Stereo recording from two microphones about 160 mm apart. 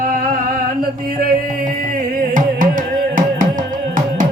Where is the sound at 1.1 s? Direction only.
60° right (ahead or behind).